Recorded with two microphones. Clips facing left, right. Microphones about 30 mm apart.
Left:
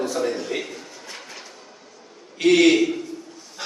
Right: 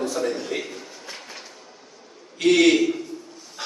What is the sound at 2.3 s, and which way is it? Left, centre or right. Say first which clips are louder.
Speech: left 1 dB; centre.